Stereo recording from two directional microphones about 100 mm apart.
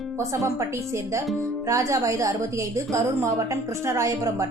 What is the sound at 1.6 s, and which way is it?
A woman's voice, 30° right (ahead or behind).